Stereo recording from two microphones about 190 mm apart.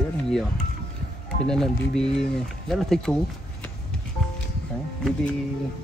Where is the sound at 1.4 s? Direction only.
5° left (ahead or behind).